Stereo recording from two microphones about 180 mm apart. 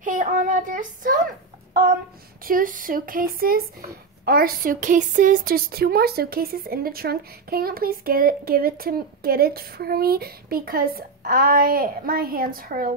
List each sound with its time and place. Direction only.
0.0 s a child's voice: 45° right (ahead or behind)
2.4 s speech: 50° right (ahead or behind)